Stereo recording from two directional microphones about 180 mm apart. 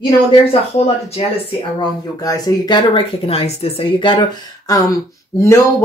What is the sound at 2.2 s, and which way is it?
Speech, 20° left (ahead or behind).